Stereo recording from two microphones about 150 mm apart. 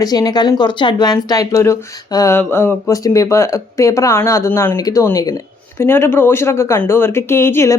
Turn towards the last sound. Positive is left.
turn(degrees=20)  # may be behind; listen again after turning